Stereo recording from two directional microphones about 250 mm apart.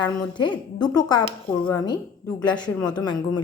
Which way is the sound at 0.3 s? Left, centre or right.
Centre.